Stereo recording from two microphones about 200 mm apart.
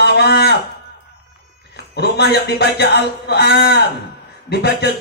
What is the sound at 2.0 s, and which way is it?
Speech, 55° left (ahead or behind).